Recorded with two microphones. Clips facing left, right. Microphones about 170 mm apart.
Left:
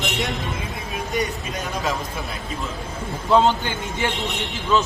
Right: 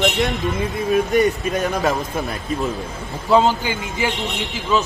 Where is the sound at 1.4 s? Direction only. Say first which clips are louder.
Right 7 dB; 60° right (ahead or behind).